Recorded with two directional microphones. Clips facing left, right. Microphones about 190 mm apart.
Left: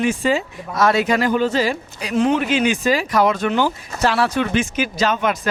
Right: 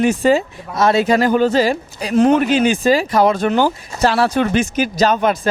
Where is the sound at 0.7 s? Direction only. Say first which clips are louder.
Right 3 dB; 25° right (ahead or behind).